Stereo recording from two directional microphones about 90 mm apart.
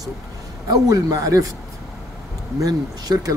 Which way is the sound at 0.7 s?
40° right (ahead or behind).